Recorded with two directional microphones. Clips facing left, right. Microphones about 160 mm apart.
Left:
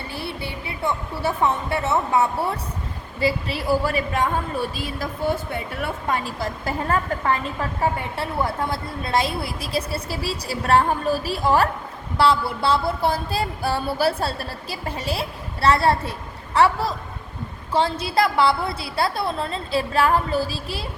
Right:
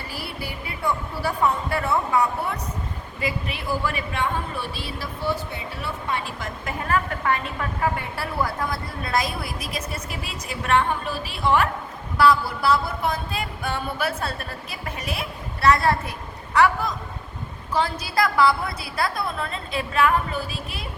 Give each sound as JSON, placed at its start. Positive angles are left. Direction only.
{"t": 0.1, "sound": "a woman's voice", "side_deg": 25}
{"t": 12.1, "sound": "a woman's voice", "side_deg": 30}